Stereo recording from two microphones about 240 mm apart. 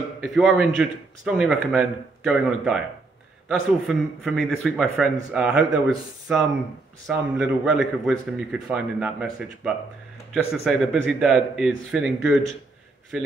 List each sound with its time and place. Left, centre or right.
0.2 s a man's voice: centre